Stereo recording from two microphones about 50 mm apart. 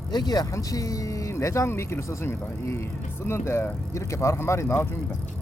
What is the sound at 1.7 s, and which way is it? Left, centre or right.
Speech, left.